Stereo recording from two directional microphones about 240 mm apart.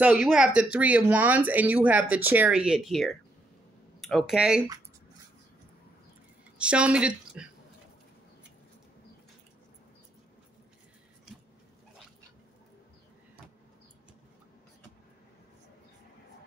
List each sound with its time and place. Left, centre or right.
0.0 s speech: centre
6.6 s speech: centre